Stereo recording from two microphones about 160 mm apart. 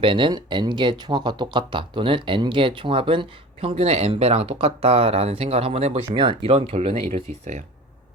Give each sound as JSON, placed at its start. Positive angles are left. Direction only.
{"t": 0.0, "sound": "speech", "side_deg": -30}